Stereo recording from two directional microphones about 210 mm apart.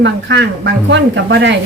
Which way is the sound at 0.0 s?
60° right (ahead or behind).